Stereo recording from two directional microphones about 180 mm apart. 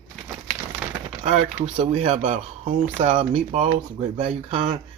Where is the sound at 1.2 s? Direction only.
40° right (ahead or behind).